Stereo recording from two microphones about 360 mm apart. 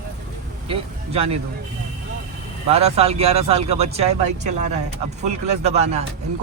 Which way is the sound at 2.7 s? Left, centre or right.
Centre.